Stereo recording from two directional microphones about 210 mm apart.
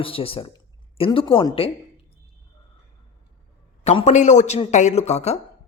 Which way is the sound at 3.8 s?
35° left (ahead or behind).